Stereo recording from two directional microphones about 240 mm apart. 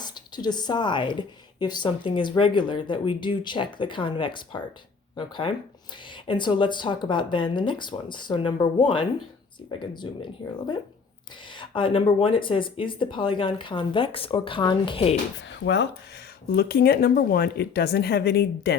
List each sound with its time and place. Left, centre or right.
0.0 s speech: centre
11.4 s speech: centre
15.4 s speech: left